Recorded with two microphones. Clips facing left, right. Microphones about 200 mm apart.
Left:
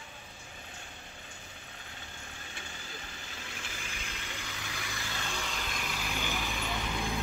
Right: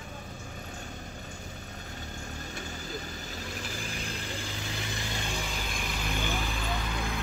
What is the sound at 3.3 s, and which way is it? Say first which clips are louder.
Vehicle: right 7 dB; 40° right (ahead or behind).